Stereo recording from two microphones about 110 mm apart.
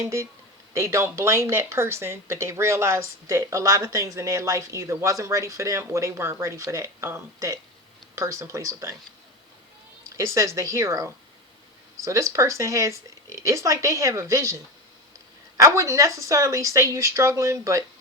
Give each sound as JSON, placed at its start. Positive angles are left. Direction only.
{"t": 0.0, "sound": "speech", "side_deg": -30}
{"t": 10.2, "sound": "speech", "side_deg": -30}